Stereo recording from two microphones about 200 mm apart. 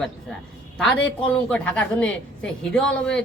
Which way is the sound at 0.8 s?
Centre (ahead or behind).